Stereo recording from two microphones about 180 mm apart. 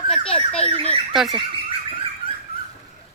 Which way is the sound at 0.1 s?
30° left (ahead or behind).